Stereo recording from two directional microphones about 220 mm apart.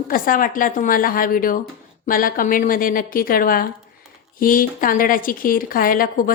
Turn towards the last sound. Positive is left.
turn(degrees=40)  # may be behind; listen again after turning